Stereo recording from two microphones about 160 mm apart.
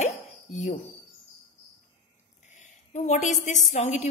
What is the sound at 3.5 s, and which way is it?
Speech, 50° left (ahead or behind).